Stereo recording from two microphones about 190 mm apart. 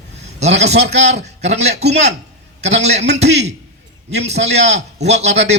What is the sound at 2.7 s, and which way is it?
Speech, 60° right (ahead or behind).